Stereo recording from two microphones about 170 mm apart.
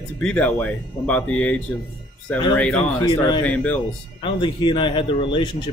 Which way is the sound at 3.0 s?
25° left (ahead or behind).